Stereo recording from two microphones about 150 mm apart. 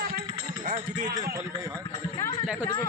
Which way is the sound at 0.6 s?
65° right (ahead or behind).